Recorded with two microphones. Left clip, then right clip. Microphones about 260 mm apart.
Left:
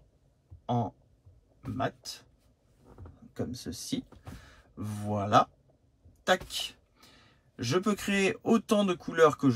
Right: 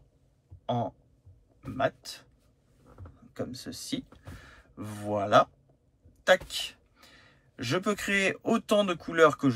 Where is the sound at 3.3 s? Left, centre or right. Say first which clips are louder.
Even; left.